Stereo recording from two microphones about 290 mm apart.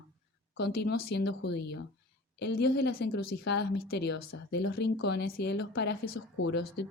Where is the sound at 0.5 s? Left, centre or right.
Left.